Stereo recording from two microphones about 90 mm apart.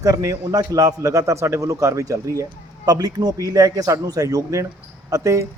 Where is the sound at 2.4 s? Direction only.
45° right (ahead or behind).